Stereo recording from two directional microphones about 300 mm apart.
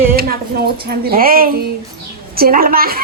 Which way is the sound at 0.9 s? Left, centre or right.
Right.